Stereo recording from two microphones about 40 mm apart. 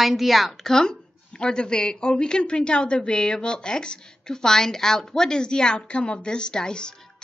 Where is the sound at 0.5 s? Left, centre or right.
Centre.